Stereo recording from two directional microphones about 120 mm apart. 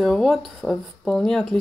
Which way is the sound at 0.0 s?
Centre (ahead or behind).